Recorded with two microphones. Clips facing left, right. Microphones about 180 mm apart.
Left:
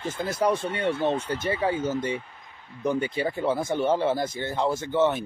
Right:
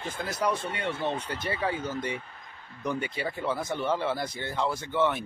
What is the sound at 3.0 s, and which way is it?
Speech, 25° left (ahead or behind).